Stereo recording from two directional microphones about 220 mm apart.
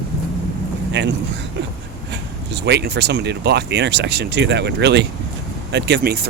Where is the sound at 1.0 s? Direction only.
55° right (ahead or behind).